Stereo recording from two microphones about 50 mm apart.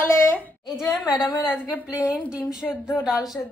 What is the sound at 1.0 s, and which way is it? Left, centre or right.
Speech, centre.